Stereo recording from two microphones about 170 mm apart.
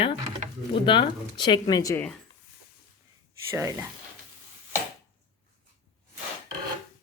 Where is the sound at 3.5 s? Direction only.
15° right (ahead or behind).